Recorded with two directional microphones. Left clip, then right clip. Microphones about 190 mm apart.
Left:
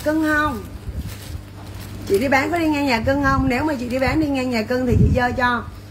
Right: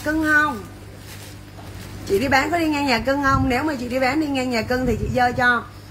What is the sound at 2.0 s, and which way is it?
A woman's voice, 15° right (ahead or behind).